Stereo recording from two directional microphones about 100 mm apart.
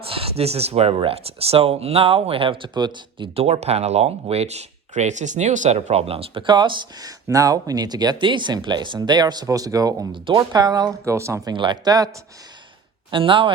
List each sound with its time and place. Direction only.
0.1 s speech: 80° right
0.9 s speech: 75° right (ahead or behind); by 3.2 s 50° right (ahead or behind)
3.3 s speech: 85° right; by 7.1 s 50° right (ahead or behind)
7.3 s speech: 35° right (ahead or behind)
11.1 s speech: 30° right (ahead or behind)
11.5 s speech: 50° right (ahead or behind)
13.1 s speech: 60° right (ahead or behind)